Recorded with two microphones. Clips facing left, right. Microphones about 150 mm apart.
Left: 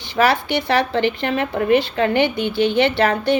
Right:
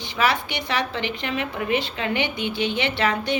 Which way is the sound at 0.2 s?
50° left (ahead or behind).